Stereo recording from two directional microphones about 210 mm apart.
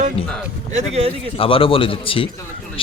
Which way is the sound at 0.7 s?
30° right (ahead or behind).